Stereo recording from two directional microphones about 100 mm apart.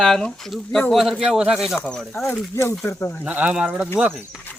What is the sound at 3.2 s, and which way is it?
Speech, 15° right (ahead or behind).